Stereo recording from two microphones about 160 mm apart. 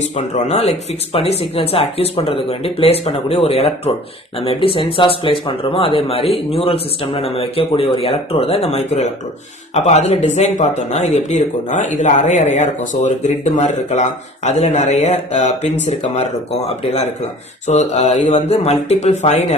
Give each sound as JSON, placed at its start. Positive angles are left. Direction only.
{"t": 0.0, "sound": "speech", "side_deg": 45}